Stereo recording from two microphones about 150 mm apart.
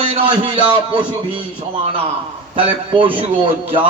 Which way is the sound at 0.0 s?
40° right (ahead or behind).